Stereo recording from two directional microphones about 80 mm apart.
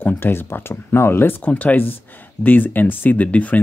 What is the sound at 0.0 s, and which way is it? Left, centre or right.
Speech, left.